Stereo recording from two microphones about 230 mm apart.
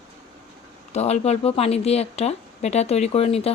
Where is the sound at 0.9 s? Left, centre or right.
Left.